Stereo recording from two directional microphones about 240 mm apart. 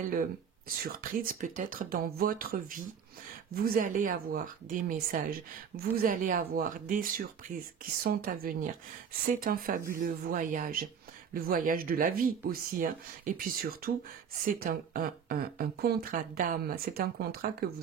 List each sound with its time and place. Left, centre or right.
0.1 s speech: right